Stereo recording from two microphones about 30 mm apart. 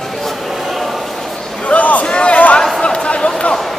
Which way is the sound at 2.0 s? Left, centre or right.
Left.